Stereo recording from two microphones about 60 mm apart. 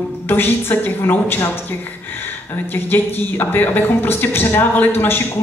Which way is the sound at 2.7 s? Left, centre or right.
Left.